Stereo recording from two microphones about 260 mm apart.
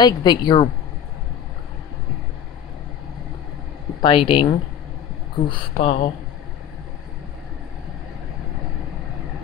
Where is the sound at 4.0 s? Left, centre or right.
Centre.